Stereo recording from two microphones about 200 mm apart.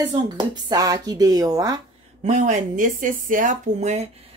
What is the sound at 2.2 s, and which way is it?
Speech, 35° right (ahead or behind).